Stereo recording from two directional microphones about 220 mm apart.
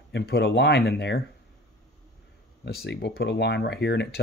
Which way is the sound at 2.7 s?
50° left (ahead or behind).